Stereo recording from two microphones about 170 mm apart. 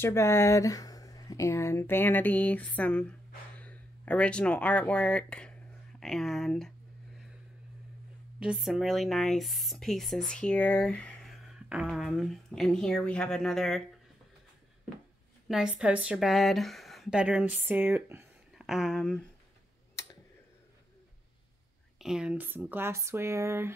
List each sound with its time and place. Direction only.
0.0 s speech: 15° left (ahead or behind)
8.4 s speech: 5° right (ahead or behind)
15.4 s a woman's voice: 5° right (ahead or behind)
18.6 s speech: centre (ahead or behind)
21.9 s a woman's voice: 5° right (ahead or behind)